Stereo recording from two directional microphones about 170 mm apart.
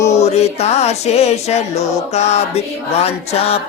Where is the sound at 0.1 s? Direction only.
40° left (ahead or behind).